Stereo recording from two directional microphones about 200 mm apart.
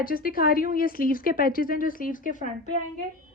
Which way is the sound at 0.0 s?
45° left (ahead or behind).